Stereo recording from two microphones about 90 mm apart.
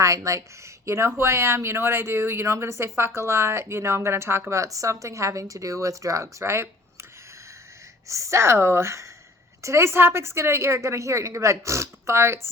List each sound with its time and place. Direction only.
0.0 s speech: 35° right (ahead or behind)
8.0 s speech: 35° right (ahead or behind)